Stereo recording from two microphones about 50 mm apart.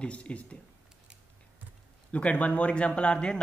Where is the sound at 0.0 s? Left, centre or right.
Left.